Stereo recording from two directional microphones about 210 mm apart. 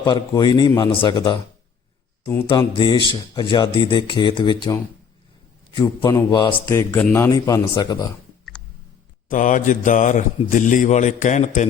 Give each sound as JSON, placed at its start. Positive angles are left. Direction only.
{"t": 0.0, "sound": "speech", "side_deg": 20}
{"t": 2.2, "sound": "speech", "side_deg": 10}
{"t": 2.5, "sound": "a man's voice", "side_deg": 20}
{"t": 9.3, "sound": "a man's voice", "side_deg": 40}